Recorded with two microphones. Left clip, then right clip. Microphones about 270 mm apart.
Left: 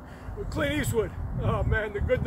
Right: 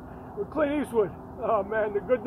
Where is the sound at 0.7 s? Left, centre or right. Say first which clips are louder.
Right 2 dB; left.